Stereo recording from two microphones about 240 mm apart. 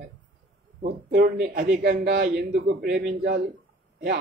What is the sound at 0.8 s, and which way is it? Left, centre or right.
A man's voice, right.